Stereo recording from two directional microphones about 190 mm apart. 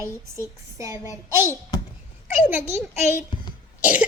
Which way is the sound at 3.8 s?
10° right (ahead or behind).